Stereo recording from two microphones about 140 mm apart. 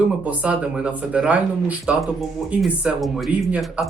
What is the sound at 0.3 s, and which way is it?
Speech, 5° right (ahead or behind).